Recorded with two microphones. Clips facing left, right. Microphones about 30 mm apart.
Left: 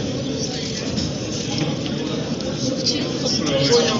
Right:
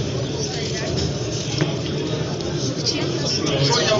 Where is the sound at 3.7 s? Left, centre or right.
Centre.